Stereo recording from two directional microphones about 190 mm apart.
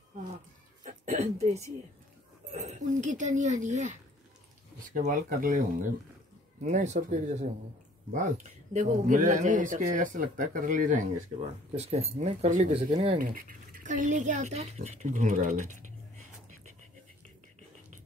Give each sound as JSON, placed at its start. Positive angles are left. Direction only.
{"t": 0.8, "sound": "speech", "side_deg": -35}
{"t": 8.7, "sound": "speech", "side_deg": -40}
{"t": 13.2, "sound": "speech", "side_deg": -45}